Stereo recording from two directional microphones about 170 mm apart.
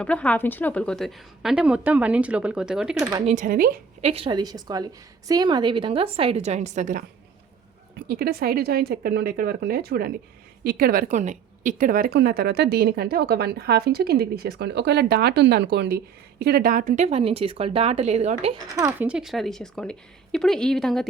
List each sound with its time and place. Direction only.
0.0 s a woman's voice: 5° left (ahead or behind)
3.0 s a woman's voice: 25° right (ahead or behind)
3.2 s speech: 50° right (ahead or behind)
4.0 s a woman's voice: 35° right (ahead or behind)
7.9 s a woman's voice: 65° right (ahead or behind); by 18.5 s 40° right (ahead or behind)
18.8 s speech: 15° right (ahead or behind)
19.0 s a woman's voice: 5° right (ahead or behind)